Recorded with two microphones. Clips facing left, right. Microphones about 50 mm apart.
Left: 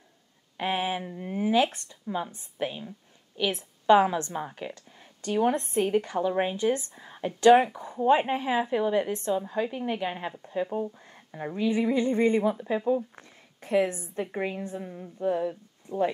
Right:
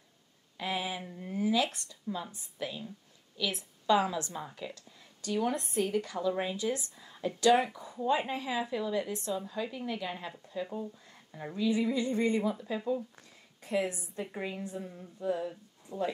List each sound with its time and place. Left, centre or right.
0.6 s a woman's voice: left